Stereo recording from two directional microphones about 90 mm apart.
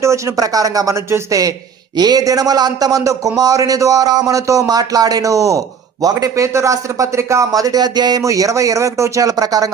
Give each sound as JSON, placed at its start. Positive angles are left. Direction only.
{"t": 0.0, "sound": "a man's voice", "side_deg": -35}
{"t": 8.2, "sound": "a man's voice", "side_deg": -35}